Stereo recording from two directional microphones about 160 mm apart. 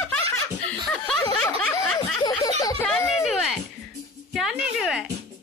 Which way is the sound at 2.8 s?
10° left (ahead or behind).